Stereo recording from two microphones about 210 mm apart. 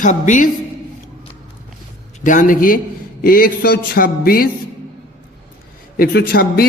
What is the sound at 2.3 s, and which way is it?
A man's voice, 40° left (ahead or behind).